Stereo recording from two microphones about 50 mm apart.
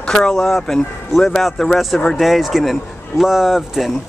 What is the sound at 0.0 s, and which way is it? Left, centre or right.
A man's voice, centre.